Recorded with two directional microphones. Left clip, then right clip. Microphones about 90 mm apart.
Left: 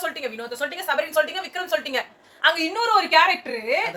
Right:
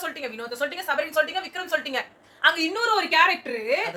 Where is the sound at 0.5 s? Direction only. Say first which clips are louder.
Left 1 dB; 5° left (ahead or behind).